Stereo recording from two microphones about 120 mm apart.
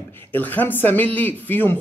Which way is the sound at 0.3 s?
15° left (ahead or behind).